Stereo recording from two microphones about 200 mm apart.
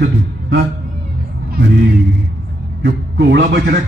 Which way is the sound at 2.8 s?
60° right (ahead or behind).